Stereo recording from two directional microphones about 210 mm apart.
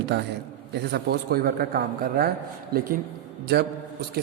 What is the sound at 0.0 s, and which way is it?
A man's voice, 55° right (ahead or behind).